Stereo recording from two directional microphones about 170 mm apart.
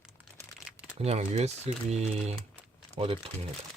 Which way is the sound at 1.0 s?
35° right (ahead or behind).